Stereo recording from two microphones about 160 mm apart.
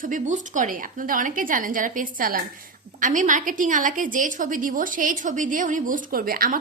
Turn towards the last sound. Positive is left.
turn(degrees=-65)  # may be behind; listen again after turning